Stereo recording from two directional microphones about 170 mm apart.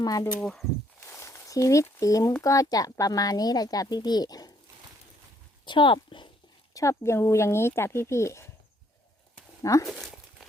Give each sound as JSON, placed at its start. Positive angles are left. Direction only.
{"t": 0.0, "sound": "speech", "side_deg": 20}
{"t": 0.3, "sound": "speech", "side_deg": 5}
{"t": 1.0, "sound": "a sound", "side_deg": 15}
{"t": 2.4, "sound": "speech", "side_deg": 20}
{"t": 5.6, "sound": "speech", "side_deg": 30}
{"t": 6.7, "sound": "speech", "side_deg": 15}
{"t": 9.8, "sound": "speech", "side_deg": 0}